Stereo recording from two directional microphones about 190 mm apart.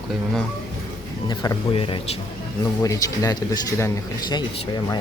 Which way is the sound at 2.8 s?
15° left (ahead or behind).